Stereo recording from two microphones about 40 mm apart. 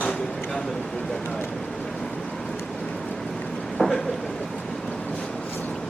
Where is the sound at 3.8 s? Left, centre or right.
Centre.